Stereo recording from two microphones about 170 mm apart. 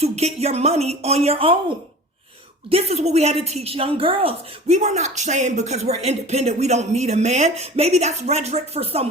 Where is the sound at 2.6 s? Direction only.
35° right (ahead or behind).